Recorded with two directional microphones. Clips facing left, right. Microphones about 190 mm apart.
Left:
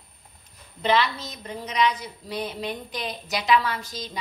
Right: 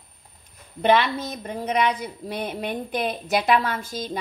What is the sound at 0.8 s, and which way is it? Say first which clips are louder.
A woman's voice: right 4 dB; 55° right (ahead or behind).